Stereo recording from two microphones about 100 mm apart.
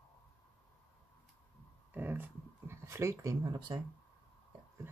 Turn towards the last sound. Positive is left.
turn(degrees=-40)  # may be behind; listen again after turning